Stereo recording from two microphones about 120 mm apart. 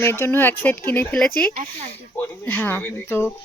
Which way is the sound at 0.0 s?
20° left (ahead or behind).